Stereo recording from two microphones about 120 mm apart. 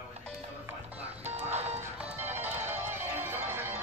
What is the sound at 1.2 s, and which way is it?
Music, 65° right (ahead or behind).